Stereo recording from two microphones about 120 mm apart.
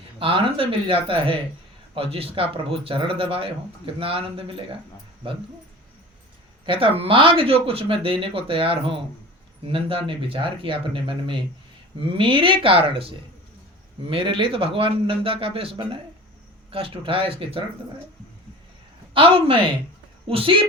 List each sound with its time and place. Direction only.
0.2 s speech: 45° right (ahead or behind)
6.7 s speech: 50° right (ahead or behind)
19.1 s speech: 45° right (ahead or behind)